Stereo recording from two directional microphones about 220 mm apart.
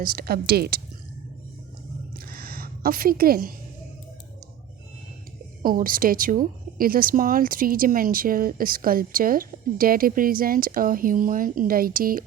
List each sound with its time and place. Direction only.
0.0 s a woman's voice: 40° right (ahead or behind)
2.1 s a sound: 45° right (ahead or behind)
5.6 s speech: 40° right (ahead or behind)